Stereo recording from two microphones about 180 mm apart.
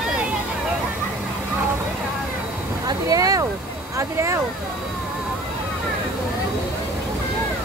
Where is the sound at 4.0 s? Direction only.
15° right (ahead or behind).